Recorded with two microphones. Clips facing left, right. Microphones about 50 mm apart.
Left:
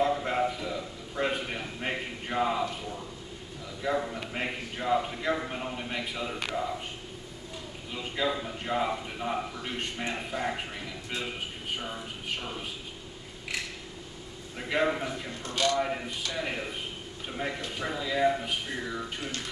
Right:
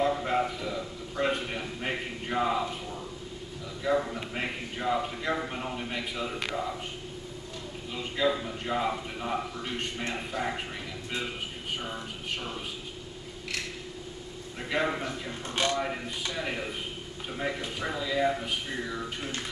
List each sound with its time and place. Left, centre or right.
0.0 s a sound: centre
3.8 s a man's voice: centre
7.9 s a man's voice: centre
11.8 s a man's voice: centre
14.6 s a man's voice: centre
15.4 s a man's voice: right
16.3 s a man's voice: centre